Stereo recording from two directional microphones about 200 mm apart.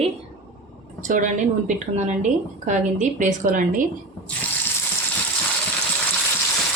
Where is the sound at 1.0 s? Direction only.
40° right (ahead or behind).